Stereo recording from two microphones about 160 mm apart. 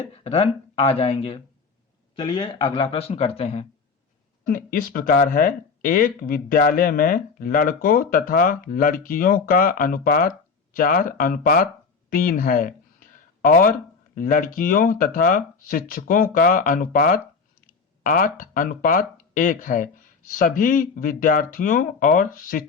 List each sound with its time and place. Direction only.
0.3 s speech: 40° left (ahead or behind)
4.4 s speech: 60° left (ahead or behind)
12.1 s a sound: 60° left (ahead or behind)
14.2 s speech: 60° left (ahead or behind)